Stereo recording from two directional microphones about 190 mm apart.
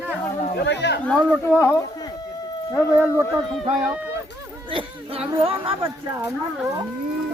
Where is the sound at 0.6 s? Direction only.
65° left (ahead or behind).